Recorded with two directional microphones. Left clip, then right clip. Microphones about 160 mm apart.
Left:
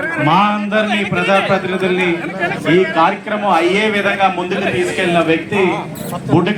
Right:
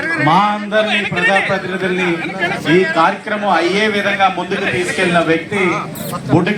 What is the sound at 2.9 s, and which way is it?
A man's voice, 10° right (ahead or behind).